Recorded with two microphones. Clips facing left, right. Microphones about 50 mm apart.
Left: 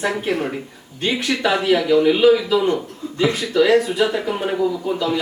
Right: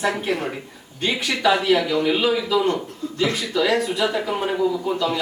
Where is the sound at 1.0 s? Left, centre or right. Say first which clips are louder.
Left 1 dB; centre.